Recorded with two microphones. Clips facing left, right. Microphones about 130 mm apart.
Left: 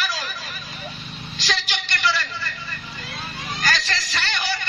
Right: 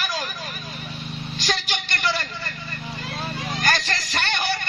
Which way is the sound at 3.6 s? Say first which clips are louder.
Right 1 dB; 50° right (ahead or behind).